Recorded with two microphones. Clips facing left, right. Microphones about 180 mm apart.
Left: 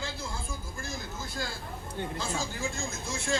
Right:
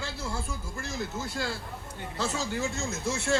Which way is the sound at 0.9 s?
70° right (ahead or behind).